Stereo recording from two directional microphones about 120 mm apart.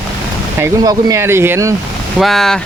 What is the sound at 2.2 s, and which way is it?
Speech, centre (ahead or behind).